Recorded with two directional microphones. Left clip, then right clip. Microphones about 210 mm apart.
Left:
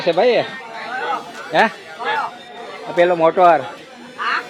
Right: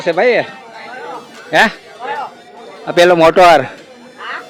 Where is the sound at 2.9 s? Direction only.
60° right (ahead or behind).